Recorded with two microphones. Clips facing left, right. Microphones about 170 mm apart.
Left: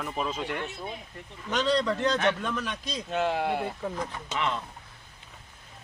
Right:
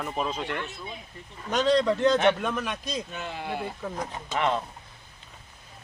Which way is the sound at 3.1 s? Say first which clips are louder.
Left 9 dB; 80° left.